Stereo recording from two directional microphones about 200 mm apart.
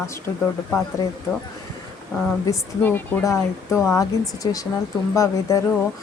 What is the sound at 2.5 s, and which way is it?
A woman's voice, 10° left (ahead or behind).